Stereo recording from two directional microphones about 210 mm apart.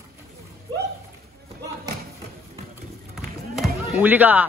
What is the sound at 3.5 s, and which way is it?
Music, 5° right (ahead or behind).